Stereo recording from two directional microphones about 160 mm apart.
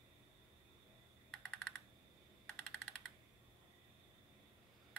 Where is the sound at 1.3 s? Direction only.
5° left (ahead or behind).